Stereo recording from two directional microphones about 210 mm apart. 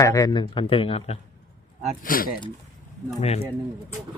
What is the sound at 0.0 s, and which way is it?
Speech, 15° left (ahead or behind).